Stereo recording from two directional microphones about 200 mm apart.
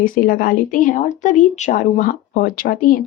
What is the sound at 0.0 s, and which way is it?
Speech, 45° left (ahead or behind).